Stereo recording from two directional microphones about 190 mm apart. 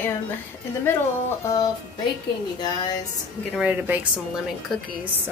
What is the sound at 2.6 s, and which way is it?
Speech, 20° left (ahead or behind).